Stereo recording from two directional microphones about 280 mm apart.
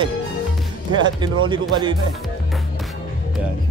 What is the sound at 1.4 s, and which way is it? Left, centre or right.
Speech, centre.